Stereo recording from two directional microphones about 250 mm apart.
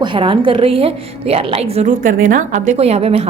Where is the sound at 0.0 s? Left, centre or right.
Centre.